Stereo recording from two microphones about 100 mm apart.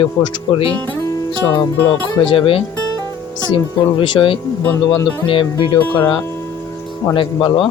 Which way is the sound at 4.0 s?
60° left (ahead or behind).